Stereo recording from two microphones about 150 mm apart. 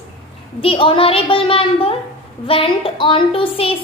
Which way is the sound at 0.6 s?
35° left (ahead or behind).